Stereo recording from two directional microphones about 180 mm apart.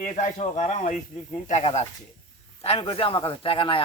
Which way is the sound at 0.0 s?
45° left (ahead or behind).